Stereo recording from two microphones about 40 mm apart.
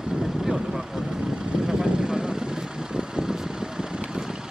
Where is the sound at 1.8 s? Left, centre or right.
Centre.